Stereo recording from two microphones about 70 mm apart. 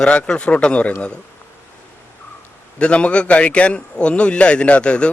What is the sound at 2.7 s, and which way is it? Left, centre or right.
A man's voice, centre.